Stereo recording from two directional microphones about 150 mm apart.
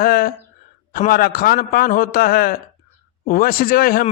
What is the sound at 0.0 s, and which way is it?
A man's voice, 75° left (ahead or behind).